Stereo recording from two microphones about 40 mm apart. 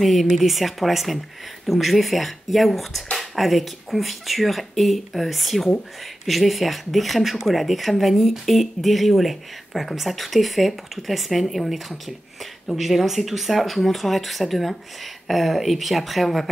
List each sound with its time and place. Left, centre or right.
0.0 s speech: centre